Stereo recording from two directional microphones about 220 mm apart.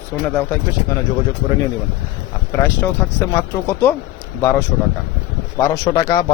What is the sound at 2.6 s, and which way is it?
Speech, 10° left (ahead or behind).